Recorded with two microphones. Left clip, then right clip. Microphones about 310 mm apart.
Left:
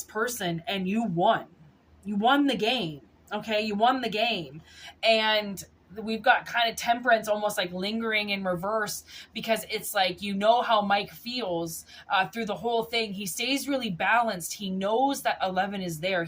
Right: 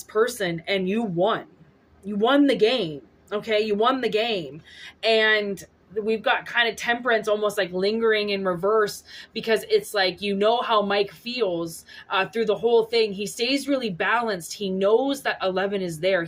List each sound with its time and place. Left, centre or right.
0.1 s a woman's voice: centre